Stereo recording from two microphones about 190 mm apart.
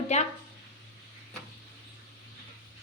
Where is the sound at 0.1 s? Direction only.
35° left (ahead or behind).